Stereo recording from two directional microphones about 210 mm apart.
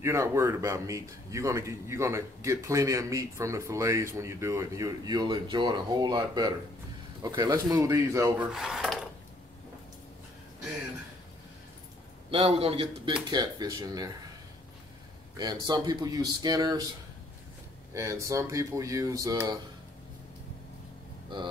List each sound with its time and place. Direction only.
0.0 s a man's voice: 15° right (ahead or behind)
8.5 s dishes: centre (ahead or behind)
12.3 s speech: 30° right (ahead or behind)
15.3 s speech: 20° right (ahead or behind)
17.9 s a man's voice: 15° right (ahead or behind)